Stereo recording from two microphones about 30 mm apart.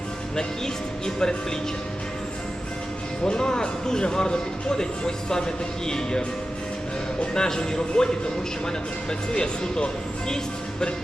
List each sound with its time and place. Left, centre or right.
0.3 s speech: left
3.2 s speech: left
7.3 s speech: left